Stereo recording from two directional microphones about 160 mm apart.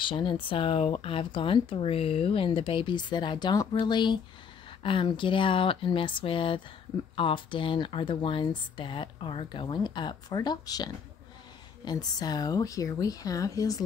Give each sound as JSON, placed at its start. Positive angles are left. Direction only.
{"t": 0.0, "sound": "speech", "side_deg": 30}